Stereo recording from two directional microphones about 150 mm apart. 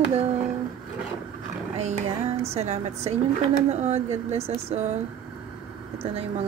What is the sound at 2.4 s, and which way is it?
Speech, 45° right (ahead or behind).